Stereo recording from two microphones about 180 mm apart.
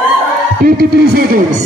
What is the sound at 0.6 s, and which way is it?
Music, 60° right (ahead or behind).